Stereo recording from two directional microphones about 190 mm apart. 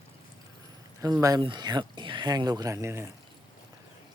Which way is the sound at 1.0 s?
20° right (ahead or behind).